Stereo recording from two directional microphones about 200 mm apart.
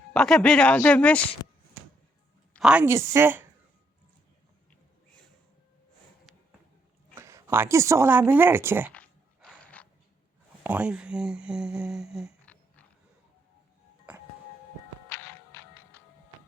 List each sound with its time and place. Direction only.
0.1 s speech: 5° left (ahead or behind)
1.4 s a sound: 25° left (ahead or behind)
2.5 s a woman's voice: 5° right (ahead or behind)
7.2 s a woman's voice: 15° right (ahead or behind)
8.9 s a sound: 5° left (ahead or behind)
10.6 s speech: 5° right (ahead or behind)
15.1 s music: 10° left (ahead or behind)